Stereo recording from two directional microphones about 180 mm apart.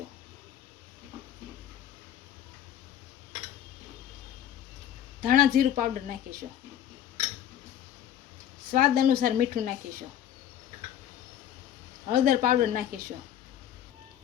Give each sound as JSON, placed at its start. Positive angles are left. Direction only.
{"t": 5.2, "sound": "a woman's voice", "side_deg": -50}
{"t": 8.7, "sound": "a woman's voice", "side_deg": -50}
{"t": 12.1, "sound": "a woman's voice", "side_deg": -50}